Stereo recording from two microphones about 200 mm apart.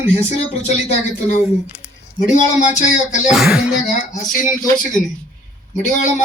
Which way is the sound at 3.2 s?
5° right (ahead or behind).